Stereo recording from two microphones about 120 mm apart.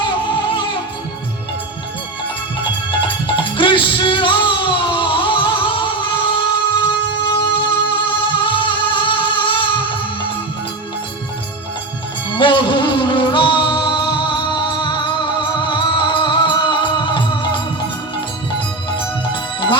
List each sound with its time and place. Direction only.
0.0 s music: 40° left (ahead or behind)
3.2 s music: 40° left (ahead or behind)
12.4 s music: 40° left (ahead or behind)
19.3 s music: 40° left (ahead or behind)